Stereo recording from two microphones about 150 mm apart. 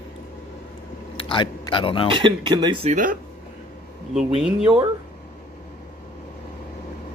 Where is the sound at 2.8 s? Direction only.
60° right (ahead or behind).